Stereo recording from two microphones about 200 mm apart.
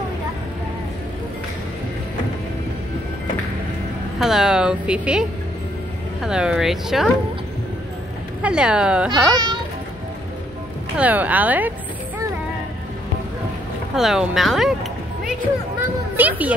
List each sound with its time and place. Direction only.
4.2 s speech: centre (ahead or behind)
6.2 s speech: 5° right (ahead or behind)
8.4 s speech: 5° right (ahead or behind)
9.3 s children playing: 20° right (ahead or behind)
11.0 s speech: 10° right (ahead or behind)
13.9 s a child's voice: centre (ahead or behind)